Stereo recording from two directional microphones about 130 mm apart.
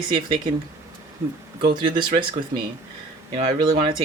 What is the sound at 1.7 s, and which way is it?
Speech, 35° right (ahead or behind).